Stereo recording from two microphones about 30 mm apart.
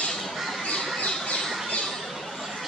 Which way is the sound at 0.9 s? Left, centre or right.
Left.